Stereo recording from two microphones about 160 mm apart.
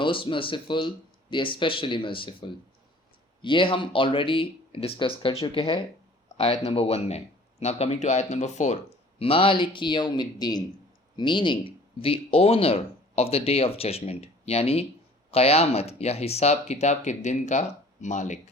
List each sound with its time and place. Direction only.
0.0 s speech: 30° left (ahead or behind); by 18.3 s 50° left (ahead or behind)